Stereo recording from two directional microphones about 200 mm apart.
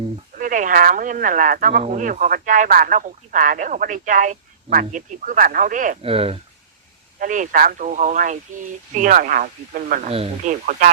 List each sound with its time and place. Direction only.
0.3 s speech: 40° right (ahead or behind)
6.0 s speech: 30° right (ahead or behind)
7.2 s speech: 40° right (ahead or behind)
10.1 s speech: 30° right (ahead or behind)
10.7 s speech: 40° right (ahead or behind)